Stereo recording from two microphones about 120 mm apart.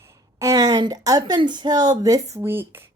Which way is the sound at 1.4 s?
40° right (ahead or behind).